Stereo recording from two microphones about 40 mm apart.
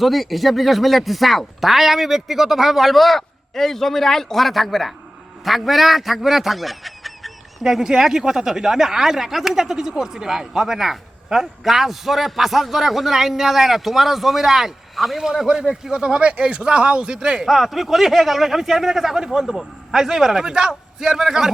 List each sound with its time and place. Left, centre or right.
0.0 s a man's voice: centre
7.6 s speech: centre
17.4 s speech: centre